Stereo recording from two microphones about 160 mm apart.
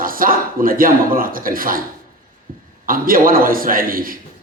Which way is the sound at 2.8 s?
60° right (ahead or behind).